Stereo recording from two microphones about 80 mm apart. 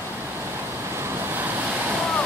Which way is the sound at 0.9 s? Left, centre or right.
Right.